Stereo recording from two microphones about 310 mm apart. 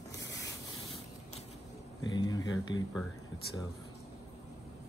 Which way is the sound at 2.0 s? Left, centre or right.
Centre.